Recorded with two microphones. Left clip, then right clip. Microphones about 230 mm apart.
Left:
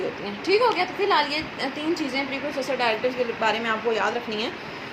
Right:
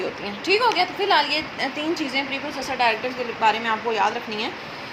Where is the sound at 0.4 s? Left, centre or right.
Right.